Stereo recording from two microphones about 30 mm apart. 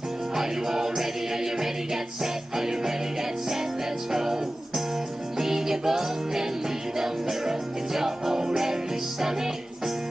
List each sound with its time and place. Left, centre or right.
0.4 s music: centre
4.1 s music: centre